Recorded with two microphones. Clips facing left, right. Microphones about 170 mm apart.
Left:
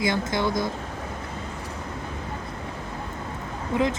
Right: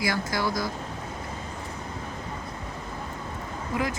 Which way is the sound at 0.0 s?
20° left (ahead or behind).